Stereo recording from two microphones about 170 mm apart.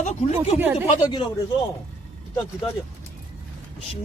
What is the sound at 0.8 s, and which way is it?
Speech, 30° left (ahead or behind).